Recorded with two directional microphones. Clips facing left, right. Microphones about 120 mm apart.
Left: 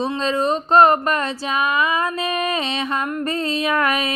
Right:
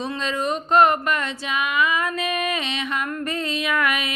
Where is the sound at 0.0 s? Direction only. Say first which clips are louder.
Left 5 dB; 35° left (ahead or behind).